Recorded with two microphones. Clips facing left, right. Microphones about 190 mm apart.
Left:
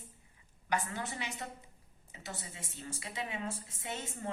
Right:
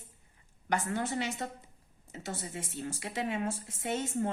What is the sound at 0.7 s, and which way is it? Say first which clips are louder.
A woman's voice: right 5 dB; 45° right (ahead or behind).